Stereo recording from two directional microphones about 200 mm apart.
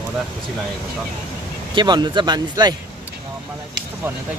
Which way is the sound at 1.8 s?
20° right (ahead or behind).